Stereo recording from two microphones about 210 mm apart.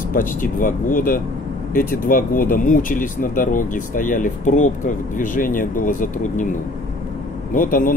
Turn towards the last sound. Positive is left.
turn(degrees=40)  # may be behind; listen again after turning